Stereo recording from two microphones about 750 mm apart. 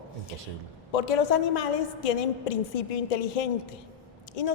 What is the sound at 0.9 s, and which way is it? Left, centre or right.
A woman's voice, left.